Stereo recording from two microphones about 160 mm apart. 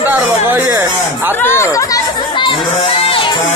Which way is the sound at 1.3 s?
15° left (ahead or behind).